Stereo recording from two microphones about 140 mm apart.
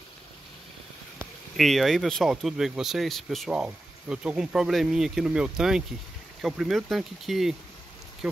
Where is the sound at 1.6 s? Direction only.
Centre (ahead or behind).